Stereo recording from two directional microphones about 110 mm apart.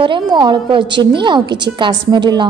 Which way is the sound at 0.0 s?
45° right (ahead or behind).